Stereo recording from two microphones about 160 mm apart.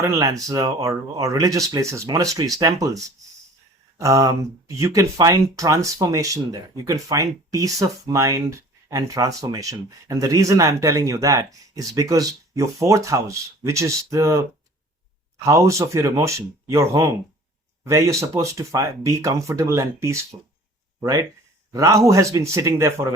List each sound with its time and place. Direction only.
0.0 s speech: 20° right (ahead or behind)
15.4 s speech: 20° right (ahead or behind)